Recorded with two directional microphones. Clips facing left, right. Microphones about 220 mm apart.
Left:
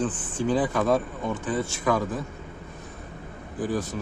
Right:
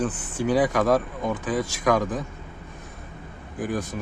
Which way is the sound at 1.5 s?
90° right.